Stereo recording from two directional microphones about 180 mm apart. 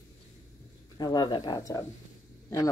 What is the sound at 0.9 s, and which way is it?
Speech, 25° left (ahead or behind).